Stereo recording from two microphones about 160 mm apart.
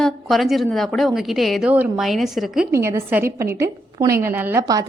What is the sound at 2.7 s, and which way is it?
A woman's voice, 15° right (ahead or behind).